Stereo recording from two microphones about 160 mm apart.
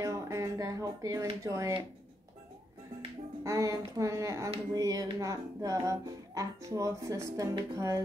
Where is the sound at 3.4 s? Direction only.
20° right (ahead or behind).